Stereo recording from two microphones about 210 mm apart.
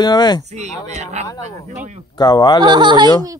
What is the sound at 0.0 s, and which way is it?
Speech, 20° left (ahead or behind).